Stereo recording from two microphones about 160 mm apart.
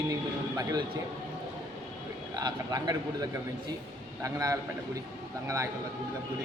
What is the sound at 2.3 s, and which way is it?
A man's voice, 25° right (ahead or behind).